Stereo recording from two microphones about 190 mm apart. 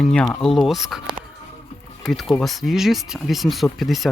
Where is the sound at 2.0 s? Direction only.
Centre (ahead or behind).